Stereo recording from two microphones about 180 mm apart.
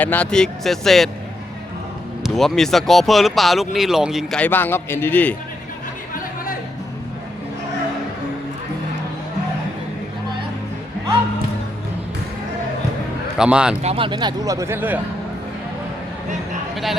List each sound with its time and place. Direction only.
0.0 s speech: 10° left (ahead or behind)
2.2 s speech: centre (ahead or behind)
13.4 s speech: 5° right (ahead or behind)
13.8 s speech: 30° right (ahead or behind); by 15.0 s 10° right (ahead or behind)
16.7 s speech: centre (ahead or behind)